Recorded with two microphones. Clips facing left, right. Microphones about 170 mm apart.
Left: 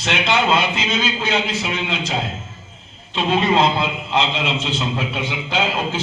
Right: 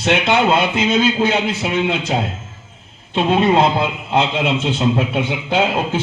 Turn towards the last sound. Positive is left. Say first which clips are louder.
# right 4 dB
turn(degrees=-55)  # may be behind; listen again after turning